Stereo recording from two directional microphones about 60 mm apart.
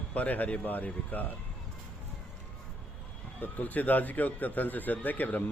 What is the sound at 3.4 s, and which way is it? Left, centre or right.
A man's voice, left.